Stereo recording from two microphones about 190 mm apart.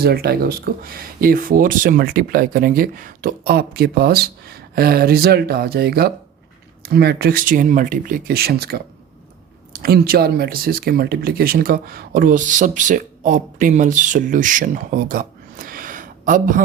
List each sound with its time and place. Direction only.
0.0 s speech: 55° right (ahead or behind)